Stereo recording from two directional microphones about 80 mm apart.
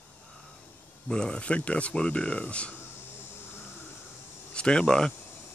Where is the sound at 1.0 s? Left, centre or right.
Centre.